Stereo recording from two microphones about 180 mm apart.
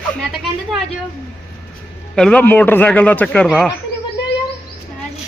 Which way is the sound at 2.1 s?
5° left (ahead or behind).